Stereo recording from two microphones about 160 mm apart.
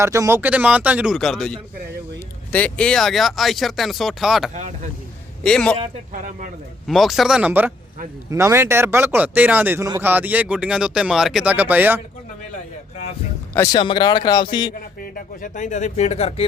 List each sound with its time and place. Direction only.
0.0 s speech: 20° right (ahead or behind); by 4.5 s centre (ahead or behind)
4.5 s speech: 50° right (ahead or behind)
5.4 s a man's voice: 5° left (ahead or behind)
6.1 s speech: 55° right (ahead or behind)
6.8 s speech: centre (ahead or behind)
13.7 s speech: 30° left (ahead or behind)
15.0 s speech: 60° left (ahead or behind); by 16.5 s 40° left (ahead or behind)